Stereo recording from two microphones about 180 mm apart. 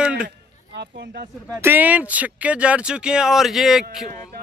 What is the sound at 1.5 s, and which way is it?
Speech, 10° right (ahead or behind).